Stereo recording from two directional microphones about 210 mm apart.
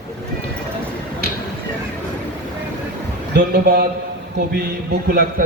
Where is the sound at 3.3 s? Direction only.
50° right (ahead or behind).